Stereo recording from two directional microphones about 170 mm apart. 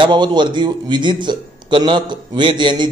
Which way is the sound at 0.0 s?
25° right (ahead or behind).